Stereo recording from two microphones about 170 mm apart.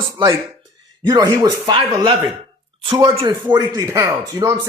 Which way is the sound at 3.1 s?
25° right (ahead or behind).